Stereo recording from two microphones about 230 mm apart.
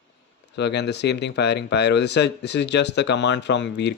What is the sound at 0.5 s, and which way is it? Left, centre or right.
Speech, left.